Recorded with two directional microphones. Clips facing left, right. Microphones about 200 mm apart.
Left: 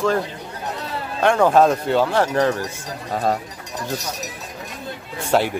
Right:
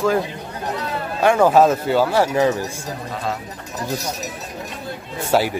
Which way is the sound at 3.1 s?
40° left (ahead or behind).